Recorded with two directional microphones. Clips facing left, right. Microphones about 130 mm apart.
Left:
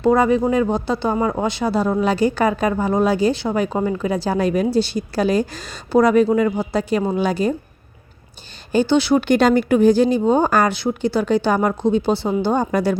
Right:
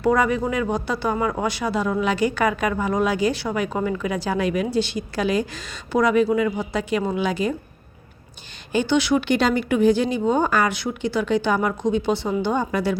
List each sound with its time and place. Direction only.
0.0 s speech: 25° left (ahead or behind)
8.7 s speech: 35° left (ahead or behind)
9.2 s speech: 45° left (ahead or behind)